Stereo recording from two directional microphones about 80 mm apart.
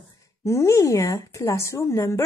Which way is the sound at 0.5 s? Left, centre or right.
Left.